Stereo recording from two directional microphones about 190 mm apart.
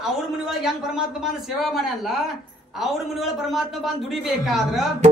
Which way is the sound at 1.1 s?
Centre (ahead or behind).